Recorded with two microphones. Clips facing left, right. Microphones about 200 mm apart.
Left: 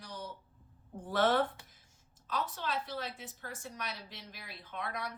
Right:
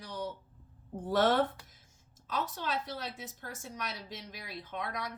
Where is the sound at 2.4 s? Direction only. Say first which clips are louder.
Right 1 dB; 45° right (ahead or behind).